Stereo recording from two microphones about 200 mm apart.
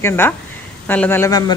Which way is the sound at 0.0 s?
10° left (ahead or behind).